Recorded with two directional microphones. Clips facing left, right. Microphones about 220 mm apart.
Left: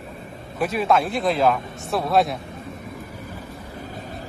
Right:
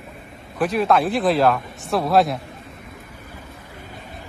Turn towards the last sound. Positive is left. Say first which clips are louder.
# left 4 dB
turn(degrees=40)  # may be behind; listen again after turning